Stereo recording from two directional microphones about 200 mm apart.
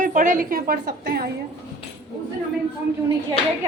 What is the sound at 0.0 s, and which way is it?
Speech, 40° right (ahead or behind).